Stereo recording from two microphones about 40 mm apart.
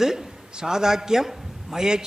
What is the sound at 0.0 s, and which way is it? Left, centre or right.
A man's voice, centre.